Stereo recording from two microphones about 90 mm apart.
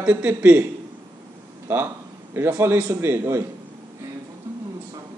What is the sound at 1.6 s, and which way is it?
A man's voice, 25° right (ahead or behind).